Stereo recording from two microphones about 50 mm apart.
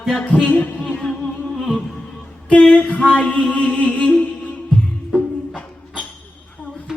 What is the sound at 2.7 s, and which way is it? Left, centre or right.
Mantra, left.